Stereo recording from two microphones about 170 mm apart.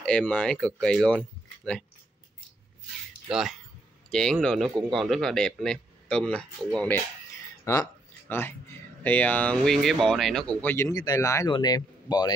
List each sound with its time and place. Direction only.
0.0 s speech: 5° left (ahead or behind)
3.3 s speech: centre (ahead or behind)
7.6 s a sound: 15° left (ahead or behind)
9.0 s speech: 10° left (ahead or behind)